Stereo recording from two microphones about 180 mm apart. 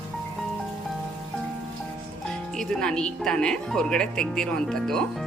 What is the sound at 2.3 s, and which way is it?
Speech, 5° left (ahead or behind).